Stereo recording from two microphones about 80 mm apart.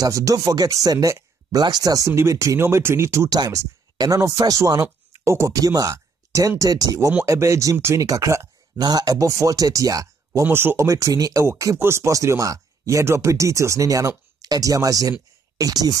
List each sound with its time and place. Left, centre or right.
0.0 s speech: right
1.6 s speech: right
3.3 s speech: right
7.2 s speech: right
8.7 s speech: right
10.4 s speech: right
10.9 s speech: right